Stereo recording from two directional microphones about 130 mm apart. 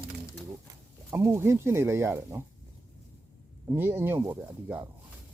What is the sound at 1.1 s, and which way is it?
Speech, 20° right (ahead or behind).